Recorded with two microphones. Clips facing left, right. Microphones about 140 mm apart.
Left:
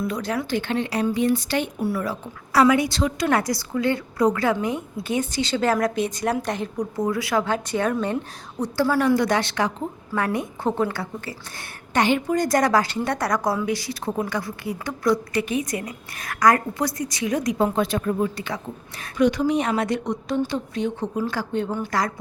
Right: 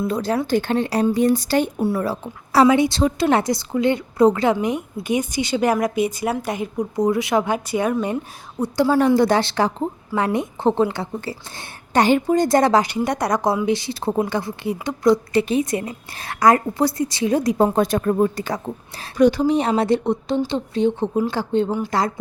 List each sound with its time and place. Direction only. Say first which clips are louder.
0.0 s a woman's voice: right 4 dB; 30° right (ahead or behind)
1.8 s a woman's voice: right 4 dB; 25° right (ahead or behind)
9.0 s a woman's voice: right 4 dB; 30° right (ahead or behind)
10.2 s a woman's voice: right 3 dB; 20° right (ahead or behind)
11.9 s a woman's voice: right 4 dB; 35° right (ahead or behind)
12.3 s a woman's voice: right 4 dB; 25° right (ahead or behind)